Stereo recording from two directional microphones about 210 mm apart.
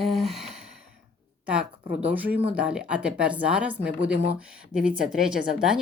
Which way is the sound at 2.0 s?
10° right (ahead or behind).